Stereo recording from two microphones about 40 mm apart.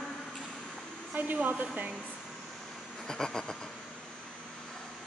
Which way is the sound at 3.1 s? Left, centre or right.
Centre.